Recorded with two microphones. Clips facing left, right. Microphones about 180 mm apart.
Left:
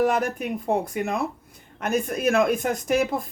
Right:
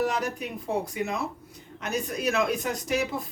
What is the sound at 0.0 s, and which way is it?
A woman's voice, 55° left (ahead or behind).